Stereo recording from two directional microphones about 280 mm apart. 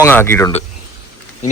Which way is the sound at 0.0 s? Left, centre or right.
Centre.